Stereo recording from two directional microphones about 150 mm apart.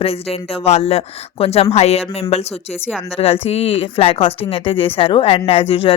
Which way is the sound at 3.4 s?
40° left (ahead or behind).